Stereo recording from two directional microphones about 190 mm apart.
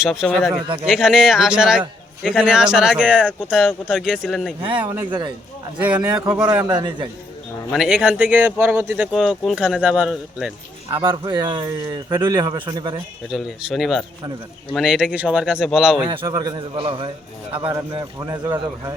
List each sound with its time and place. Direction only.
0.0 s speech: centre (ahead or behind)
4.9 s speech: 20° right (ahead or behind)
6.3 s speech: 5° right (ahead or behind)
6.7 s speech: 20° right (ahead or behind)
7.7 s speech: 5° right (ahead or behind)
9.1 s speech: centre (ahead or behind)
10.9 s speech: 25° right (ahead or behind)
13.3 s speech: centre (ahead or behind)
16.0 s speech: 20° right (ahead or behind)